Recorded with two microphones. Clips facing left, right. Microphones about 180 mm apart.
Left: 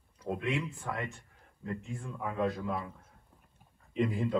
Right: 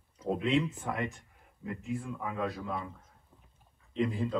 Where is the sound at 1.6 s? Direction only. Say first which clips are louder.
Right 3 dB; 5° right (ahead or behind).